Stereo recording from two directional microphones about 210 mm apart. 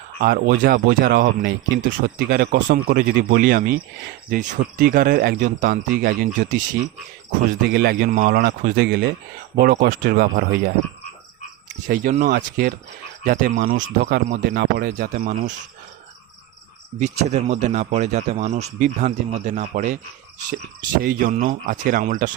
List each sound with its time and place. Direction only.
0.2 s a man's voice: 45° right (ahead or behind)
7.7 s speech: 50° right (ahead or behind)
11.9 s a man's voice: 40° right (ahead or behind)
13.8 s speech: 55° right (ahead or behind)
14.3 s a man's voice: 40° right (ahead or behind)
17.0 s a man's voice: 35° right (ahead or behind)
21.0 s a man's voice: 45° right (ahead or behind)